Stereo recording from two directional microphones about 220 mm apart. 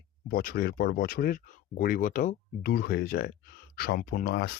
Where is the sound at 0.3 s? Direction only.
40° left (ahead or behind).